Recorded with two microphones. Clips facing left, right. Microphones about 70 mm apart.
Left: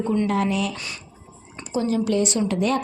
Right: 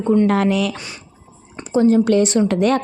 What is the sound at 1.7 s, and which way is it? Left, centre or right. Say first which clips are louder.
Speech: right 9 dB; right.